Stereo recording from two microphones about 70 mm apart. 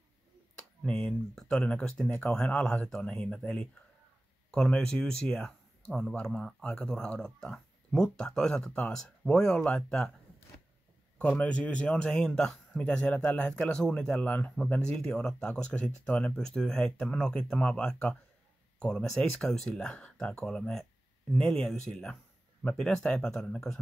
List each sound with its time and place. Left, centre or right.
0.6 s speech: centre
11.1 s a man's voice: centre